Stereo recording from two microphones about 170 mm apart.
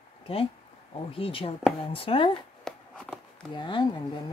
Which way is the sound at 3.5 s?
30° left (ahead or behind).